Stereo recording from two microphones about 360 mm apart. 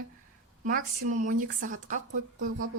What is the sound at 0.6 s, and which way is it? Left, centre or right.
Dishes, right.